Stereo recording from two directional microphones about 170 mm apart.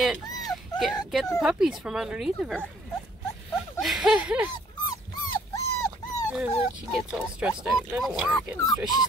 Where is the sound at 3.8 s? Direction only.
Centre (ahead or behind).